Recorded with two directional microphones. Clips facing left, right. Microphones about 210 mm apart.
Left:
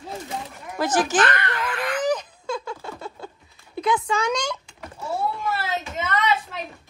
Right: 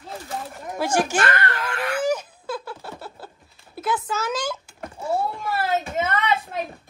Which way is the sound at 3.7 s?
5° right (ahead or behind).